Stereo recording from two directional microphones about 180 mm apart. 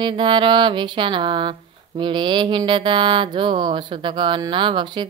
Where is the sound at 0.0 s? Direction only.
25° right (ahead or behind).